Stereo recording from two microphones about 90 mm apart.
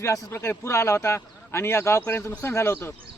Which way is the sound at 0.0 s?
30° left (ahead or behind).